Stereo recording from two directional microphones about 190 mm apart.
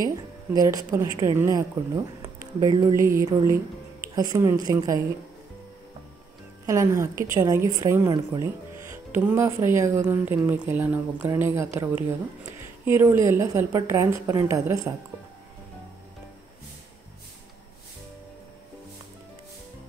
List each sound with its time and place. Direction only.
0.1 s a woman's voice: 20° right (ahead or behind)
2.2 s a sound: 20° right (ahead or behind)
3.2 s speech: 15° right (ahead or behind)
6.6 s speech: 15° right (ahead or behind)